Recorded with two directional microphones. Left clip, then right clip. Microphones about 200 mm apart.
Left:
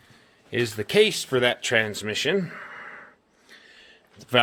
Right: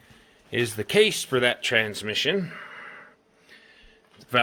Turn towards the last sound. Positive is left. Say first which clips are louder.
# left 2 dB
turn(degrees=30)  # may be behind; listen again after turning